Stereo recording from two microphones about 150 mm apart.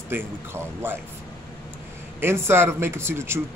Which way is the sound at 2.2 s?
15° right (ahead or behind).